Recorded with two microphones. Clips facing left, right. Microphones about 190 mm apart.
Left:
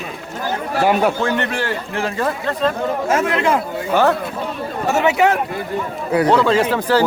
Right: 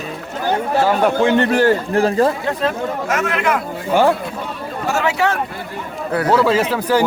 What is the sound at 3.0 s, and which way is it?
Speech, 30° left (ahead or behind).